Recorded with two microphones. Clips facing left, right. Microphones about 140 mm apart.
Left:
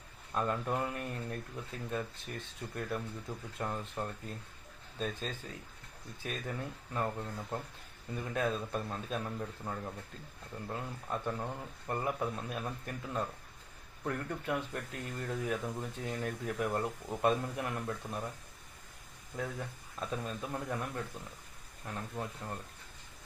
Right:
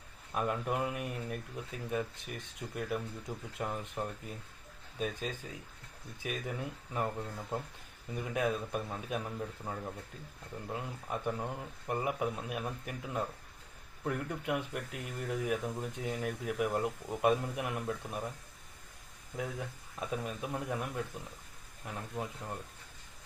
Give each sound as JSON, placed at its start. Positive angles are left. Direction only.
{"t": 0.3, "sound": "speech", "side_deg": -10}
{"t": 19.4, "sound": "speech", "side_deg": -10}